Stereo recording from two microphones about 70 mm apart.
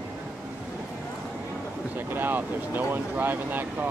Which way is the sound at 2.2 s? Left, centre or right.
Right.